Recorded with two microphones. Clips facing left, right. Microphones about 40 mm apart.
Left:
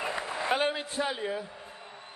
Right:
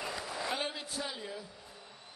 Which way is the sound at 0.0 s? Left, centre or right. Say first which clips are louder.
Left 6 dB; left.